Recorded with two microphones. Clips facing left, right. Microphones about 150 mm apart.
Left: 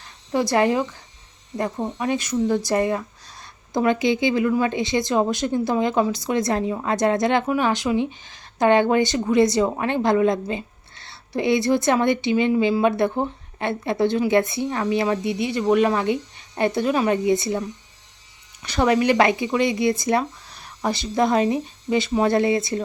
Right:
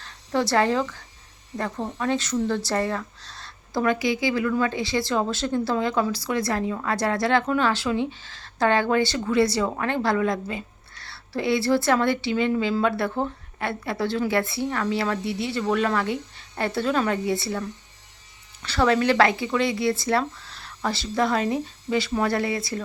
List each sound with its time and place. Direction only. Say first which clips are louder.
0.0 s speech: left 2 dB; 15° left (ahead or behind)